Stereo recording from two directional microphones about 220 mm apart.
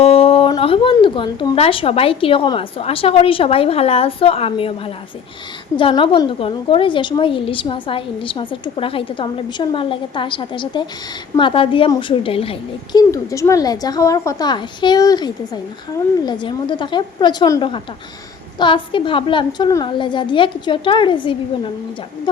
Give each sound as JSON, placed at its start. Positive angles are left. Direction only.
{"t": 0.0, "sound": "a woman's voice", "side_deg": 25}
{"t": 5.7, "sound": "a woman's voice", "side_deg": 20}